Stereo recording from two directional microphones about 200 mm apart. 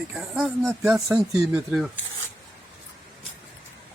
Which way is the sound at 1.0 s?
15° right (ahead or behind).